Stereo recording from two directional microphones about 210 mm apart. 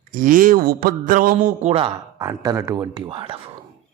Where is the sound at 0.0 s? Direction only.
40° right (ahead or behind).